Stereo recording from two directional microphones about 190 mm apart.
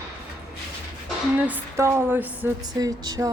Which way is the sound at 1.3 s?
10° right (ahead or behind).